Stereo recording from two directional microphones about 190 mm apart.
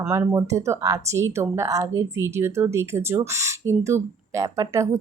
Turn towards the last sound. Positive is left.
turn(degrees=-15)  # may be behind; listen again after turning